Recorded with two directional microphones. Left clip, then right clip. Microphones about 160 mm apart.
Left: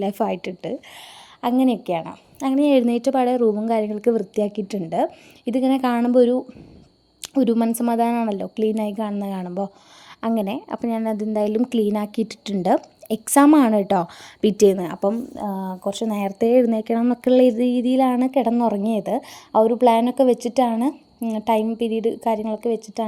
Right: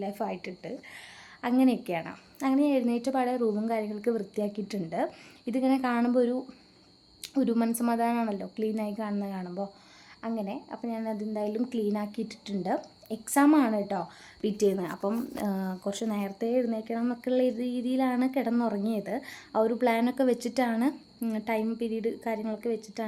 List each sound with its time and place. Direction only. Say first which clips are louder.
0.0 s speech: left 10 dB; 50° left (ahead or behind)
1.4 s a woman's voice: left 6 dB; 40° left (ahead or behind)
7.2 s a sound: left 9 dB; 40° left (ahead or behind)
7.7 s speech: left 7 dB; 45° left (ahead or behind)
10.2 s a woman's voice: left 11 dB; 65° left (ahead or behind); by 15.1 s 50° left (ahead or behind)
15.4 s speech: left 6 dB; 5° right (ahead or behind)
15.9 s a woman's voice: left 10 dB; 35° left (ahead or behind)